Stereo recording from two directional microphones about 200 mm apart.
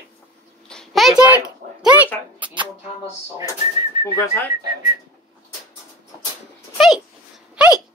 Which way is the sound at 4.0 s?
25° left (ahead or behind).